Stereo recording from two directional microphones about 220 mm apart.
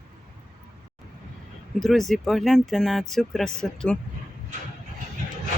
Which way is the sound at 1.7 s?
Centre (ahead or behind).